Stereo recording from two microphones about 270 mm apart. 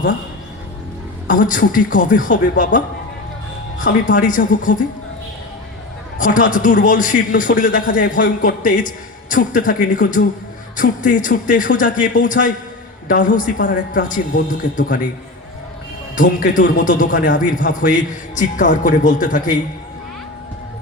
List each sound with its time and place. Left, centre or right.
1.3 s a man's voice: left
6.1 s a man's voice: left
16.1 s a man's voice: left